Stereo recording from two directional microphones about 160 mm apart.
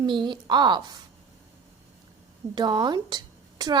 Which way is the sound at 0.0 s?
30° right (ahead or behind).